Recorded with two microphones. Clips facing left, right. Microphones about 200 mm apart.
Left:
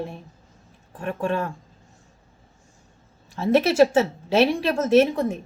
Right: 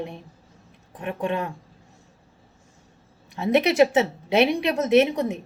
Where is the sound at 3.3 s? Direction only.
20° right (ahead or behind).